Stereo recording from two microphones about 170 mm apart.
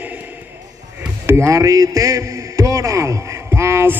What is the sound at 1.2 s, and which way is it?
A man's voice, 15° right (ahead or behind).